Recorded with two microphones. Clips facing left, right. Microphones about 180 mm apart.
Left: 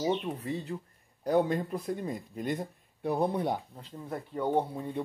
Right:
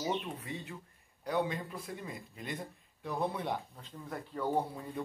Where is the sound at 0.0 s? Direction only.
35° left (ahead or behind).